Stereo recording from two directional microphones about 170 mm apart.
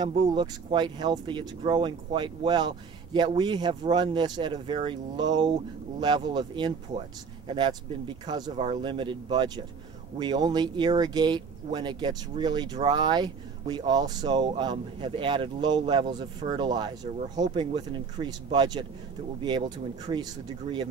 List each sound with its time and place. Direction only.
0.0 s speech: 30° right (ahead or behind)